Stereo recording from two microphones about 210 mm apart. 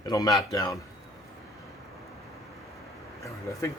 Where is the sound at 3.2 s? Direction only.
15° left (ahead or behind).